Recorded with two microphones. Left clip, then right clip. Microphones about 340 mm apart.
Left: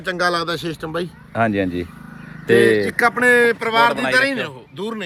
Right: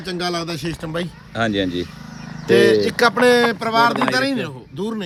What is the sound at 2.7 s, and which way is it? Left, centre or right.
A man's voice, centre.